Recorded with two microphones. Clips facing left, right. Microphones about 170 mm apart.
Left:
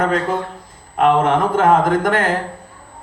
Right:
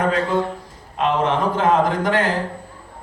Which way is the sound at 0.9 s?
50° left (ahead or behind).